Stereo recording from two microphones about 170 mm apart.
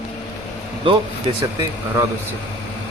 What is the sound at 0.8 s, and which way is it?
Speech, 30° right (ahead or behind).